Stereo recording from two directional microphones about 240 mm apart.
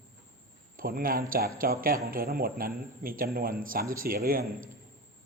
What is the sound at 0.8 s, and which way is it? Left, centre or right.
A man's voice, right.